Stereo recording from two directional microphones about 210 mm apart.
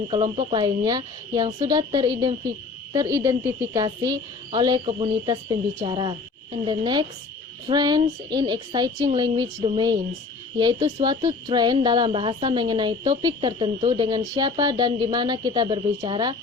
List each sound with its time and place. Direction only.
0.1 s speech: 25° right (ahead or behind)